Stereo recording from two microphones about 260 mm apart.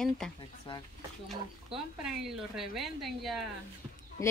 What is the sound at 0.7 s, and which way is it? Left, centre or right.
Speech, centre.